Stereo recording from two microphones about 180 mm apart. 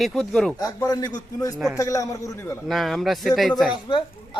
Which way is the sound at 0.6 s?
20° left (ahead or behind).